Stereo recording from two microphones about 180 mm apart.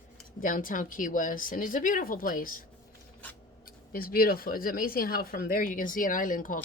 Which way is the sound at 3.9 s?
55° left (ahead or behind).